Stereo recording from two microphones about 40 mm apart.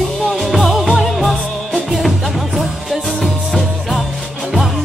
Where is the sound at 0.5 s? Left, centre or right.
Centre.